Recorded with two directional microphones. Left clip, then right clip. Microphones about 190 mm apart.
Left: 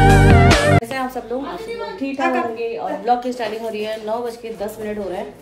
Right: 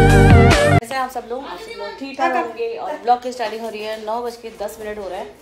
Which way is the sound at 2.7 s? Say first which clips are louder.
Right 2 dB; 5° left (ahead or behind).